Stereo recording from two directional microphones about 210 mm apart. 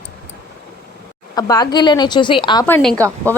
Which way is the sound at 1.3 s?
20° left (ahead or behind).